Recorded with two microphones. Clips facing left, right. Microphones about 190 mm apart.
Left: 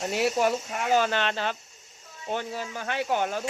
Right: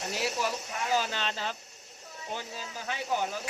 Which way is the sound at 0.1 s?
60° left (ahead or behind).